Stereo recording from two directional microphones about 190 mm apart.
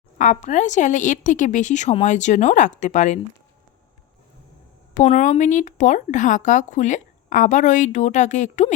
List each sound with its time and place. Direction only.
0.2 s speech: 40° left (ahead or behind)
4.9 s speech: 35° left (ahead or behind)